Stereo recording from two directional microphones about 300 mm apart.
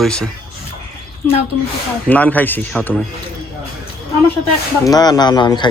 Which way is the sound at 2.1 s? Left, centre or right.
Centre.